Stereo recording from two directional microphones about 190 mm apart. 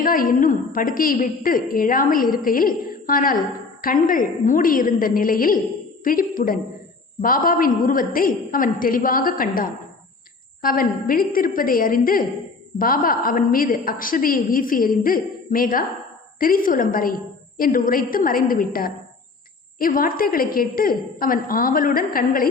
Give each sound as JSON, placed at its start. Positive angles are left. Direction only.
{"t": 0.0, "sound": "a woman's voice", "side_deg": 45}